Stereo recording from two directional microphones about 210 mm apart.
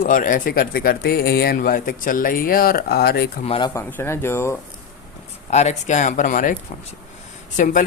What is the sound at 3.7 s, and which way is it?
Speech, 10° left (ahead or behind).